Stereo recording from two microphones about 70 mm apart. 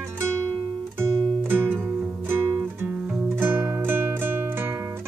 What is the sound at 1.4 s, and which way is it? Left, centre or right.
Music, right.